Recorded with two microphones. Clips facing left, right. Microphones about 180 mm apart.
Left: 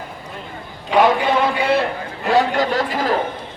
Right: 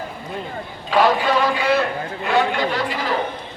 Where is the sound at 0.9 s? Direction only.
20° left (ahead or behind).